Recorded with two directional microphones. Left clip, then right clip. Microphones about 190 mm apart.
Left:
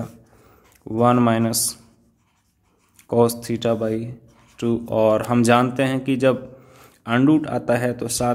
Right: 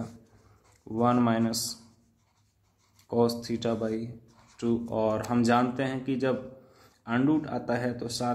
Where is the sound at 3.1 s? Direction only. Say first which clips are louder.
Left 8 dB; 30° left (ahead or behind).